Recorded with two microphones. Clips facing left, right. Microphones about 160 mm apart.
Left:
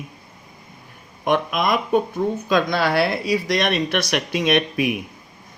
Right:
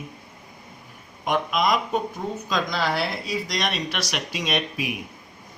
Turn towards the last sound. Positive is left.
turn(degrees=60)  # may be behind; listen again after turning